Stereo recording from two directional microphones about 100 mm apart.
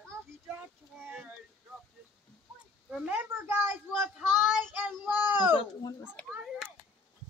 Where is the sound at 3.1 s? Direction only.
20° right (ahead or behind).